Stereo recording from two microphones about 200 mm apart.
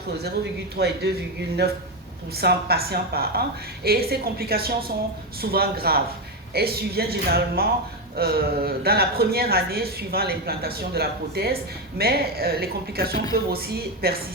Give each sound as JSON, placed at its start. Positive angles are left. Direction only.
{"t": 0.8, "sound": "speech", "side_deg": -55}
{"t": 2.3, "sound": "speech", "side_deg": -50}